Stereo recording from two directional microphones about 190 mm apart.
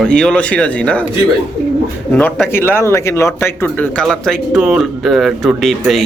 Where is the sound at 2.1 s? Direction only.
5° left (ahead or behind).